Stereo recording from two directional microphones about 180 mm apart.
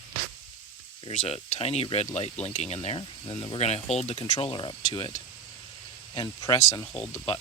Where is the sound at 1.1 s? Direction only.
40° left (ahead or behind).